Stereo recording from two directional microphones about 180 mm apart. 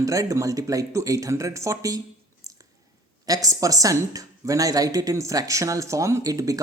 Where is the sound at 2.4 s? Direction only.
20° right (ahead or behind).